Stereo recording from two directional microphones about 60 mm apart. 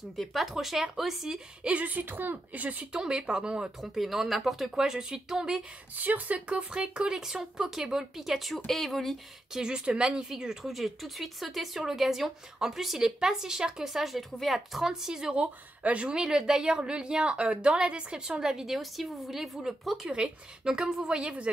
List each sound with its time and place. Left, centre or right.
0.2 s speech: centre
1.6 s a woman's voice: right
2.9 s speech: centre
3.8 s speech: centre
5.9 s speech: right; by 9.6 s centre
9.6 s speech: centre
20.1 s speech: centre